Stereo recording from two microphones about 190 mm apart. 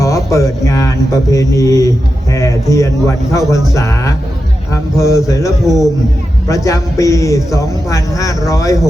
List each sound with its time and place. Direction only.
0.0 s mantra: 15° left (ahead or behind)
2.3 s a man's voice: 15° left (ahead or behind)
5.6 s speech: centre (ahead or behind)
6.5 s a man's voice: 15° left (ahead or behind)